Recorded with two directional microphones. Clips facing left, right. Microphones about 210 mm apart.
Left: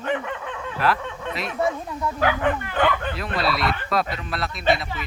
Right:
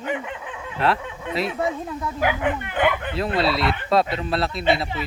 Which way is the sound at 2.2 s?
15° right (ahead or behind).